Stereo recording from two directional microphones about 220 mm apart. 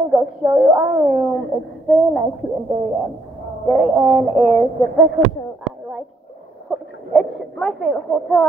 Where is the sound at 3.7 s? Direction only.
Centre (ahead or behind).